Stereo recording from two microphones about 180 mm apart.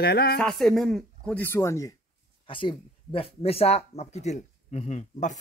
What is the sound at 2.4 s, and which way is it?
Speech, 30° left (ahead or behind).